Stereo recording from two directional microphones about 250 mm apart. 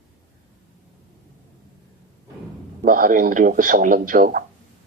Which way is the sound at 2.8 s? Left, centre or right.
Right.